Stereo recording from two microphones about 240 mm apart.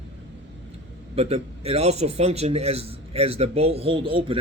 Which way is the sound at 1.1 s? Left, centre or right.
Right.